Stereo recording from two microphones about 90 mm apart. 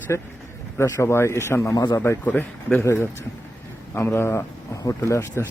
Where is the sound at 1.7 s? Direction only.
45° left (ahead or behind).